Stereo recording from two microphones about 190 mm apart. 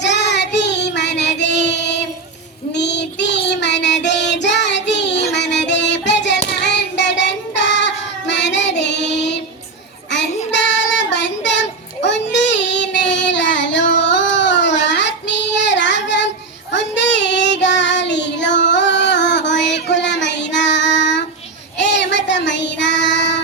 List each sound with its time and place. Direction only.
0.0 s child singing: 65° left (ahead or behind)
5.1 s child singing: 35° left (ahead or behind)
5.4 s child singing: 65° left (ahead or behind)